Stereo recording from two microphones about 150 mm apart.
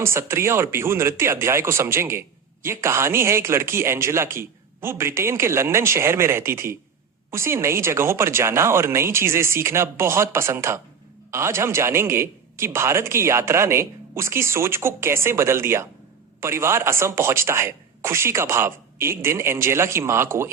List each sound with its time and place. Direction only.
0.0 s a man's voice: 15° right (ahead or behind)